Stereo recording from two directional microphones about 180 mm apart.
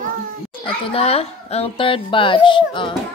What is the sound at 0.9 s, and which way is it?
A woman's voice, 35° left (ahead or behind).